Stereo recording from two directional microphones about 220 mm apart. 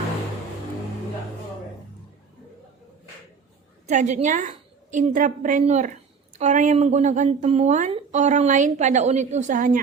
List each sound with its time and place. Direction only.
3.8 s speech: 35° right (ahead or behind)